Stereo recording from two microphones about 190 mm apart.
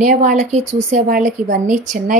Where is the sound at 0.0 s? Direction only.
40° right (ahead or behind).